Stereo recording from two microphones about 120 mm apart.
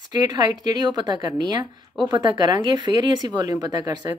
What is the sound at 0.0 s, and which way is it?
A woman's voice, 35° right (ahead or behind).